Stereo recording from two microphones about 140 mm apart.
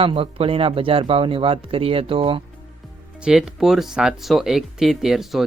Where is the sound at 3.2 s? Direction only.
5° right (ahead or behind).